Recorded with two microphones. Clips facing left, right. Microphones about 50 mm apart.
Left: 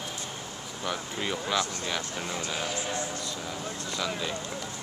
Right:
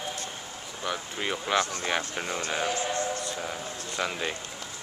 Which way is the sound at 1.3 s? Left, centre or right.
Right.